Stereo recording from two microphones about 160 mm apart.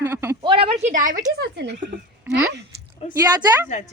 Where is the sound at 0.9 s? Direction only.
55° right (ahead or behind); by 2.0 s 80° right.